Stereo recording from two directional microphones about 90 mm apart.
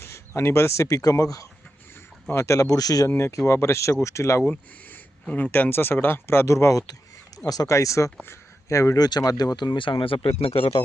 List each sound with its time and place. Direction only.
0.0 s speech: 30° left (ahead or behind)
3.2 s speech: 30° left (ahead or behind)
5.3 s speech: 20° left (ahead or behind)
9.0 s speech: 50° left (ahead or behind); by 10.2 s 75° left (ahead or behind)
10.4 s speech: 90° left